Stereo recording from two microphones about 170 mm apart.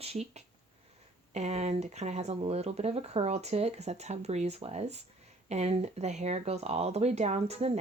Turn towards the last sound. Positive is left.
turn(degrees=-40)  # may be behind; listen again after turning